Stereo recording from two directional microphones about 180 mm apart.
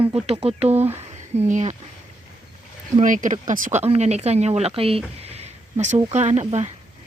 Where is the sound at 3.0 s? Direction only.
45° right (ahead or behind).